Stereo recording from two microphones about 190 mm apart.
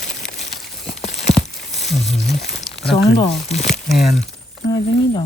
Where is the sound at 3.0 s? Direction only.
30° left (ahead or behind).